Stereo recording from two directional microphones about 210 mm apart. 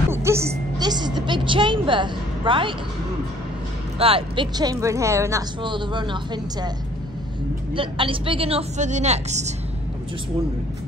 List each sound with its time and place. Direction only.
0.1 s a woman's voice: 10° right (ahead or behind)
4.0 s speech: 25° right (ahead or behind)
7.7 s speech: 25° right (ahead or behind)